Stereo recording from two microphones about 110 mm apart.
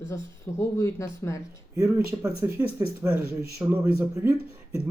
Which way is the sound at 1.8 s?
30° right (ahead or behind).